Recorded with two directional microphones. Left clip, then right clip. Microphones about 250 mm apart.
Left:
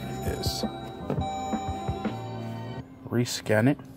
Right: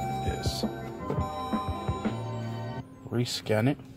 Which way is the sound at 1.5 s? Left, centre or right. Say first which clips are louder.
Left 1 dB; centre.